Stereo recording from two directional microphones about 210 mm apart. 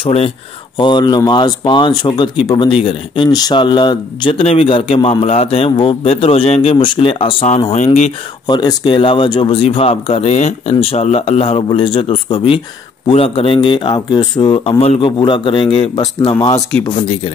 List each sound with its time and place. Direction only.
0.0 s speech: 30° left (ahead or behind)
8.5 s speech: 20° left (ahead or behind)